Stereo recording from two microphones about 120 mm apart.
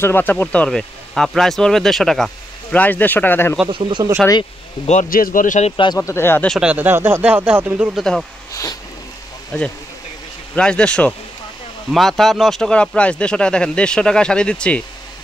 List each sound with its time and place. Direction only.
0.0 s speech: 15° left (ahead or behind); by 2.3 s centre (ahead or behind)
2.7 s speech: 15° left (ahead or behind)
3.7 s speech: 40° right (ahead or behind)
4.8 s a man's voice: 85° left
5.9 s speech: 20° left (ahead or behind)
6.6 s speech: 10° right (ahead or behind)
8.0 s speech: 5° left (ahead or behind)
10.5 s speech: 10° left (ahead or behind)